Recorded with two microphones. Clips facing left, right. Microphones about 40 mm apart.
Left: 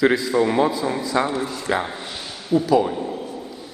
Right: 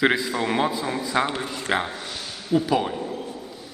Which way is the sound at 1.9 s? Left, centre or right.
Left.